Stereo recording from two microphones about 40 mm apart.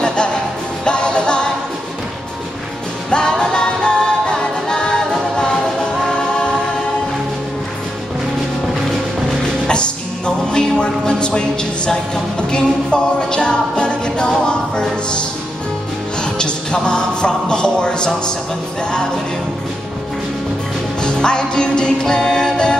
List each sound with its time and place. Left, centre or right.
0.0 s music: left
3.1 s music: left
9.7 s music: left
21.0 s music: left